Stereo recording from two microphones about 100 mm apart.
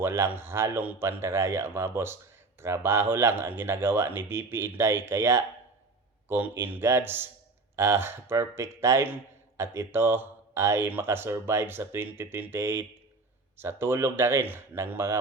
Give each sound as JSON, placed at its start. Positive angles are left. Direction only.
{"t": 0.0, "sound": "speech", "side_deg": -25}